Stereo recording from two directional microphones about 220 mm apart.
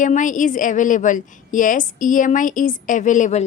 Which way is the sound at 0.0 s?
35° left (ahead or behind).